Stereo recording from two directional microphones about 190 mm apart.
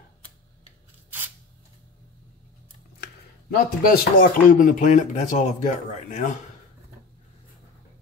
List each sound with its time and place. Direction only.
3.0 s speech: 50° left (ahead or behind)